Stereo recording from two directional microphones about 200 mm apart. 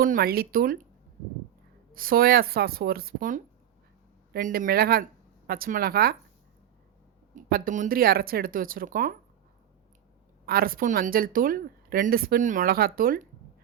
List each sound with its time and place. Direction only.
0.0 s speech: 45° right (ahead or behind)
2.0 s speech: 45° right (ahead or behind)
7.3 s speech: 45° right (ahead or behind)
10.4 s speech: 50° right (ahead or behind)